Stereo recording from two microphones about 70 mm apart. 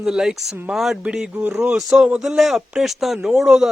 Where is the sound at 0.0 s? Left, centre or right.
Centre.